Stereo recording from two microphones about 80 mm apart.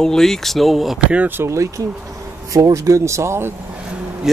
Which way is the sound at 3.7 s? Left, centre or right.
Centre.